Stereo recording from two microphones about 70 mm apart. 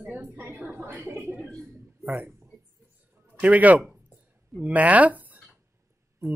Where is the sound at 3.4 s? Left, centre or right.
Right.